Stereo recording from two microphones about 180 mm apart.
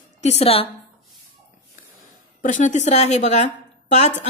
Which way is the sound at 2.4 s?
45° left (ahead or behind).